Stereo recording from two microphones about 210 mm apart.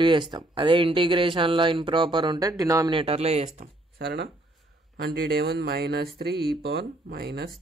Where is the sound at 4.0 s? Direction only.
50° right (ahead or behind).